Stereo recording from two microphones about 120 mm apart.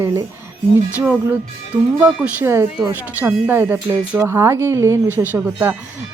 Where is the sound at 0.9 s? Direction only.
10° right (ahead or behind).